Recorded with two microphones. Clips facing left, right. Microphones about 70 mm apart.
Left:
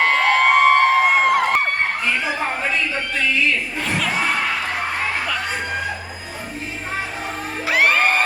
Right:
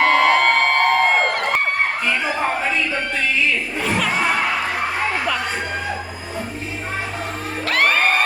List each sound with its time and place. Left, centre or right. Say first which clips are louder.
0.0 s a sound: right 1 dB; centre
3.8 s crowd: right 2 dB; centre
7.7 s music: left 1 dB; centre